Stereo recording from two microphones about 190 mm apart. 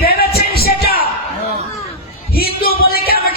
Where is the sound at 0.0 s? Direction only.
50° left (ahead or behind).